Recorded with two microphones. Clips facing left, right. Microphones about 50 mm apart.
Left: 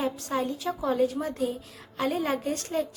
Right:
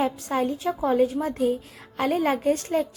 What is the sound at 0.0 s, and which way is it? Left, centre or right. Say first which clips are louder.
A woman's voice: right 4 dB; right.